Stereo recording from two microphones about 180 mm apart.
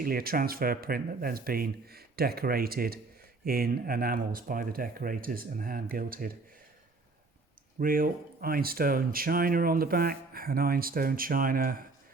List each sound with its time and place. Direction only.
0.0 s speech: 55° right (ahead or behind)
7.8 s speech: 50° right (ahead or behind)